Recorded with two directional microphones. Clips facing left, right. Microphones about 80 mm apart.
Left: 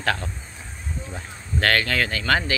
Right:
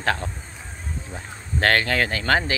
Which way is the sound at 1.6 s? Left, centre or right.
Right.